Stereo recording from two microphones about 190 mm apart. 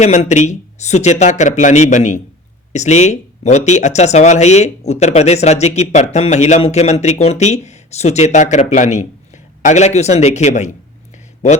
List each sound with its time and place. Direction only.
0.0 s speech: 35° left (ahead or behind)